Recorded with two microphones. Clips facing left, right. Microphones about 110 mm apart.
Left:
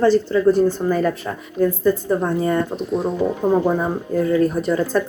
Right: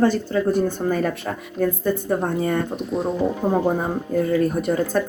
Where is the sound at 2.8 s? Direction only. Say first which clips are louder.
Left 2 dB; centre (ahead or behind).